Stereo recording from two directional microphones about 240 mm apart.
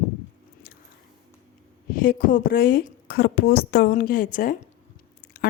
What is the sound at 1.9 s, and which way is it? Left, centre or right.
A woman's voice, left.